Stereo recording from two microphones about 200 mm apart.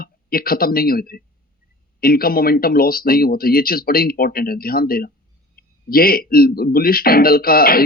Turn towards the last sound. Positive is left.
turn(degrees=50)  # may be behind; listen again after turning